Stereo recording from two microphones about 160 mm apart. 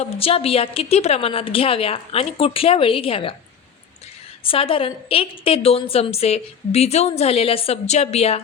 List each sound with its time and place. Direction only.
0.0 s a woman's voice: 35° left (ahead or behind)
4.4 s a woman's voice: 35° left (ahead or behind)